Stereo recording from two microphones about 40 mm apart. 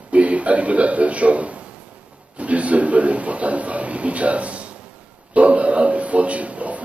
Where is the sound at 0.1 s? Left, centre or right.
Right.